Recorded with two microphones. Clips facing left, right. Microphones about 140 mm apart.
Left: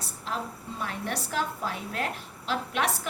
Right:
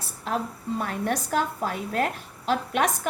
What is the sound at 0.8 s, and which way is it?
A woman's voice, 50° right (ahead or behind).